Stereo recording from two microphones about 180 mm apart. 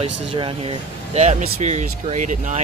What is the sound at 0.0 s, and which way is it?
Speech, 30° right (ahead or behind).